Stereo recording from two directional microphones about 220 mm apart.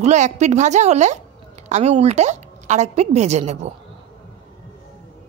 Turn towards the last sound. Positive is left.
turn(degrees=-30)  # may be behind; listen again after turning